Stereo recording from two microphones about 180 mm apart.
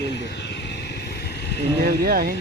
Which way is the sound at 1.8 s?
55° right (ahead or behind).